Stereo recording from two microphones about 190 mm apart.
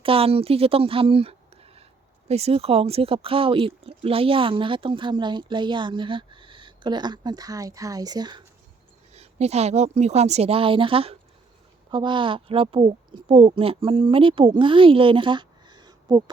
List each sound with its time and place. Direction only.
0.0 s speech: 30° right (ahead or behind)
9.1 s a woman's voice: 35° right (ahead or behind)